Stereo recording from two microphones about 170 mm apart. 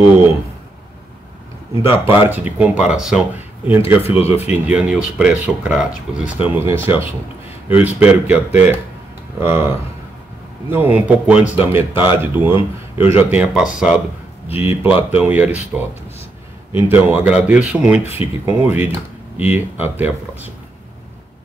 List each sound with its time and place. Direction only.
1.8 s speech: 15° right (ahead or behind)
4.0 s speech: 35° left (ahead or behind)
4.5 s speech: 5° right (ahead or behind)
9.4 s speech: 15° right (ahead or behind)